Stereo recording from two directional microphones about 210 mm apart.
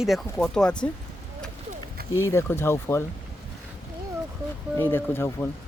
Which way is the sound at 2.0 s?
45° right (ahead or behind).